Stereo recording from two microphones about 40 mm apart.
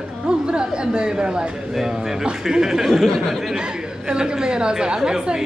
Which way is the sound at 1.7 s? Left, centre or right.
Centre.